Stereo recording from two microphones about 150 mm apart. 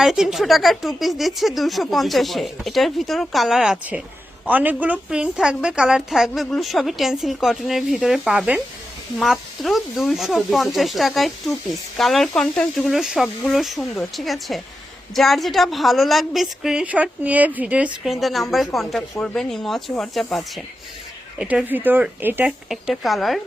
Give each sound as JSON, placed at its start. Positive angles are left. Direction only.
{"t": 0.0, "sound": "a woman's voice", "side_deg": -5}
{"t": 22.7, "sound": "a woman's voice", "side_deg": 0}